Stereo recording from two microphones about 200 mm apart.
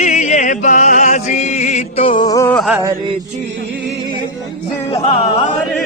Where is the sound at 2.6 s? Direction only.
5° right (ahead or behind).